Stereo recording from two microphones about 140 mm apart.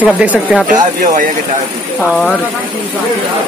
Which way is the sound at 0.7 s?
65° right (ahead or behind).